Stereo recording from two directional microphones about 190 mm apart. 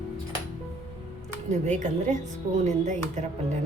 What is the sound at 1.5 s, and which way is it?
Speech, 40° right (ahead or behind).